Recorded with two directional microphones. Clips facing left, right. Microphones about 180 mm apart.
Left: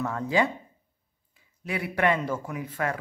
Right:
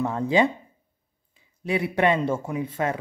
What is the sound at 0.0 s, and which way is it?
Speech, 20° right (ahead or behind).